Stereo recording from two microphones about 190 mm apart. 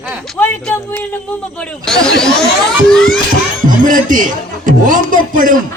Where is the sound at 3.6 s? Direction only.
45° right (ahead or behind).